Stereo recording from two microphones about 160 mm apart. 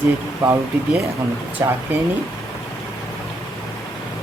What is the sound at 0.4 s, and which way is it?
Speech, 20° right (ahead or behind).